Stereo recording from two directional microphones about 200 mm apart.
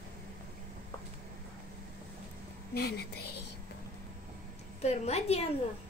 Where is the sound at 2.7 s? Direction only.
55° left (ahead or behind).